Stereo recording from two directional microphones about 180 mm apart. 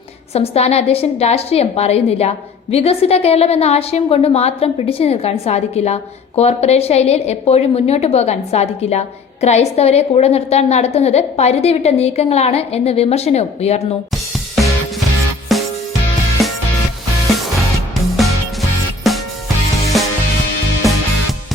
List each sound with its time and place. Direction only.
0.3 s a woman's voice: 35° left (ahead or behind)
14.1 s music: centre (ahead or behind)
19.1 s music: centre (ahead or behind)